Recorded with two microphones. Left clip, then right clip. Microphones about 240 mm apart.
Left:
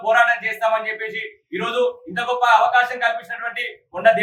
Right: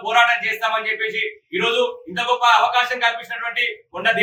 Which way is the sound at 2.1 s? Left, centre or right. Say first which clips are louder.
Right 1 dB; centre.